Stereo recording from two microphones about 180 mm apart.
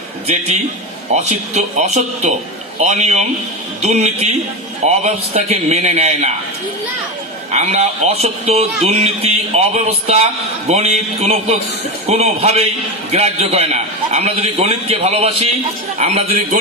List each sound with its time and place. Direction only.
0.3 s a man's voice: 40° right (ahead or behind)
7.5 s a man's voice: 40° right (ahead or behind)